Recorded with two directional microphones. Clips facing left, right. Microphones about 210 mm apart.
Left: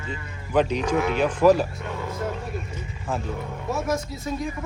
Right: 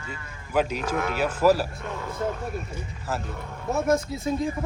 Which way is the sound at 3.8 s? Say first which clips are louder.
Right 3 dB; 25° right (ahead or behind).